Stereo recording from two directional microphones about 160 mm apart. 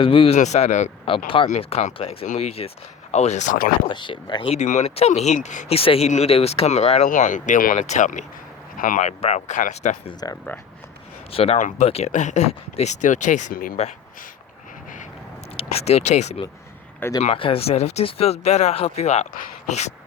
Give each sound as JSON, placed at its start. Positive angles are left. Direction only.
{"t": 0.0, "sound": "speech", "side_deg": 35}
{"t": 0.3, "sound": "speech", "side_deg": 45}
{"t": 3.8, "sound": "speech", "side_deg": 30}
{"t": 4.5, "sound": "speech", "side_deg": 45}
{"t": 10.2, "sound": "speech", "side_deg": 25}
{"t": 11.3, "sound": "speech", "side_deg": 35}
{"t": 13.7, "sound": "speech", "side_deg": 45}
{"t": 15.5, "sound": "speech", "side_deg": 40}
{"t": 19.3, "sound": "speech", "side_deg": 60}